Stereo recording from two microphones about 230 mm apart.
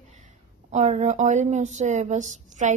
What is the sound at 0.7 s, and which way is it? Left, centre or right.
A woman's voice, right.